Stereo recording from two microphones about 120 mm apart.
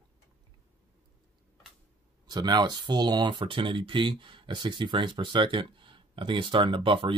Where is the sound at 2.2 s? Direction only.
35° right (ahead or behind).